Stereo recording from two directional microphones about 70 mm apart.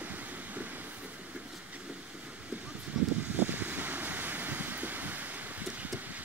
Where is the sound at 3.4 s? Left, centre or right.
Right.